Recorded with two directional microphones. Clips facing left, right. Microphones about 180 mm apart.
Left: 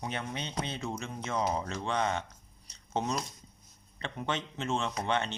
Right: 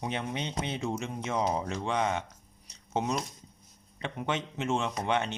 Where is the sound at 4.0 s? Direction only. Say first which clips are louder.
Right 2 dB; 10° right (ahead or behind).